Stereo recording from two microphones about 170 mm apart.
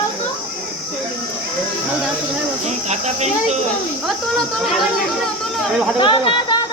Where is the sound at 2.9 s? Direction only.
40° right (ahead or behind).